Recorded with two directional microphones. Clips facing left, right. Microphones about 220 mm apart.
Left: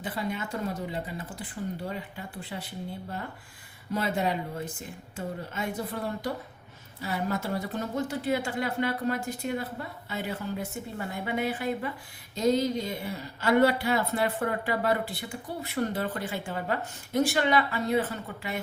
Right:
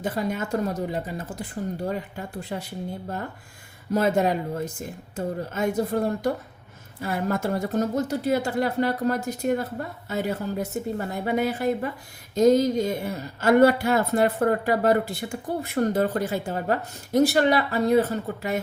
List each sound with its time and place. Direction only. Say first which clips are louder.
0.0 s speech: right 6 dB; 45° right (ahead or behind)
3.9 s speech: right 7 dB; 45° right (ahead or behind)